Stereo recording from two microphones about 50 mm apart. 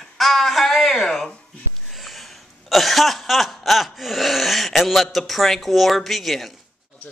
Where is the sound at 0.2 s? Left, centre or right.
Centre.